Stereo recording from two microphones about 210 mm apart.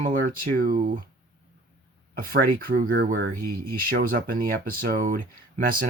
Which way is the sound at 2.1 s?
45° right (ahead or behind).